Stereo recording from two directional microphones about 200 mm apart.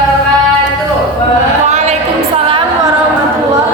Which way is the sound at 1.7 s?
35° right (ahead or behind).